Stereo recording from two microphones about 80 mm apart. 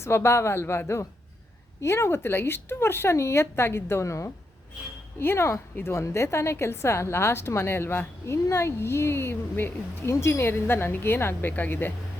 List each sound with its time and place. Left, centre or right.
0.0 s a woman's voice: left